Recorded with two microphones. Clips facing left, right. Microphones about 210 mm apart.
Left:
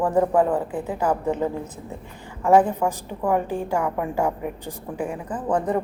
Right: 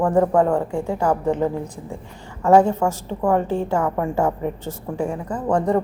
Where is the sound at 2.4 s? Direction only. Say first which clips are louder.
Right 2 dB; 15° left (ahead or behind).